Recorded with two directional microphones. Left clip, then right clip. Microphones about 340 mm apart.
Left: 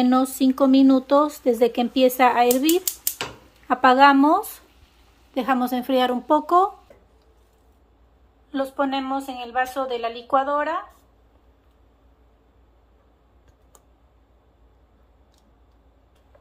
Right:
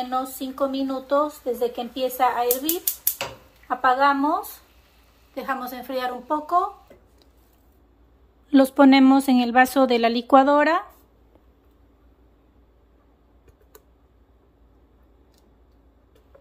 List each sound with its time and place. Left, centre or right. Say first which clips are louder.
0.0 s speech: left 7 dB; left
3.6 s a woman's voice: left 4 dB; left
8.5 s speech: right 8 dB; right